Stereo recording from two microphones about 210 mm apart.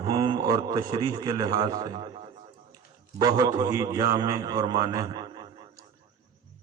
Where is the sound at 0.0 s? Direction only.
20° right (ahead or behind).